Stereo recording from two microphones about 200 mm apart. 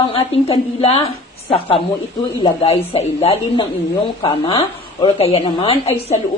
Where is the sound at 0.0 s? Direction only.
25° left (ahead or behind).